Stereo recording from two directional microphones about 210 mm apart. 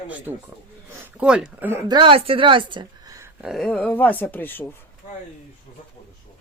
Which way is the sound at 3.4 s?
Centre (ahead or behind).